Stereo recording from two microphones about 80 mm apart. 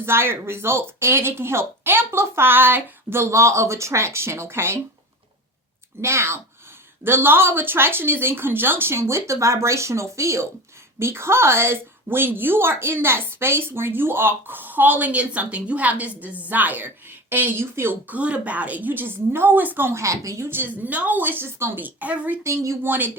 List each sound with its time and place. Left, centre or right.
0.0 s speech: right
6.0 s a woman's voice: right
18.1 s a woman's voice: centre
22.4 s speech: right
22.9 s a woman's voice: right